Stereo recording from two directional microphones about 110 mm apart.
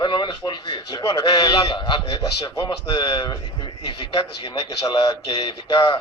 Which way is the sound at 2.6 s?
45° left (ahead or behind).